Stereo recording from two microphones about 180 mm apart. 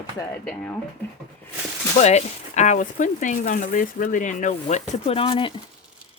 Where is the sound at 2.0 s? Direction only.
40° left (ahead or behind).